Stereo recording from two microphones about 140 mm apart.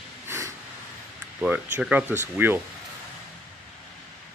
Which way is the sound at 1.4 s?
10° right (ahead or behind).